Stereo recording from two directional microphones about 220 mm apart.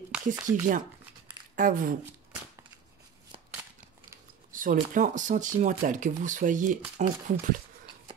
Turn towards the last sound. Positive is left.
turn(degrees=-35)  # may be behind; listen again after turning